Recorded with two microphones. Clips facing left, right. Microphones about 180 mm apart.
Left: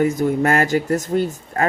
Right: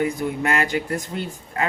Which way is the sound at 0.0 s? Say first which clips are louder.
Left 6 dB; 45° left (ahead or behind).